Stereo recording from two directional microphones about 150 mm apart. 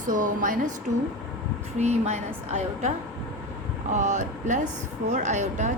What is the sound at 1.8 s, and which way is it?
A woman's voice, 50° right (ahead or behind).